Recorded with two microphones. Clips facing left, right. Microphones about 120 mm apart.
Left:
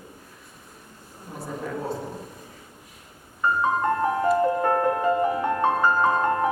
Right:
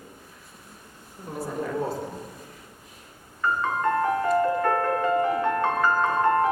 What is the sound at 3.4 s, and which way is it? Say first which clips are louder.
Music: left 2 dB; 20° left (ahead or behind).